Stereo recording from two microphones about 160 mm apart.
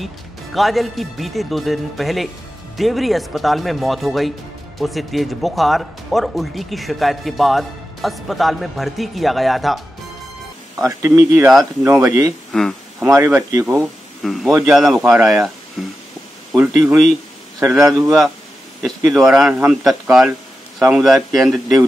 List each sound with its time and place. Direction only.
0.6 s speech: centre (ahead or behind)
10.8 s speech: 20° right (ahead or behind)
12.5 s speech: 5° left (ahead or behind)
13.0 s speech: 15° right (ahead or behind)
13.7 s speech: centre (ahead or behind)
18.8 s speech: centre (ahead or behind)